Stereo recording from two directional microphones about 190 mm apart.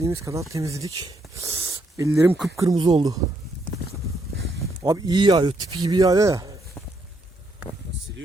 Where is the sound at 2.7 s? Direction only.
30° right (ahead or behind).